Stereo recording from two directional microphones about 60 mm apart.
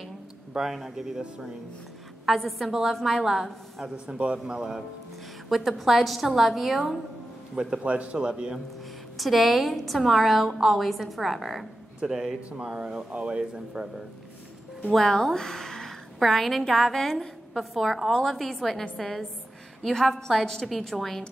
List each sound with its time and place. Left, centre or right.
0.6 s a woman's voice: centre
2.2 s a woman's voice: centre
3.8 s speech: centre
5.5 s a woman's voice: centre
7.5 s speech: centre
9.1 s a woman's voice: centre
14.9 s a woman's voice: centre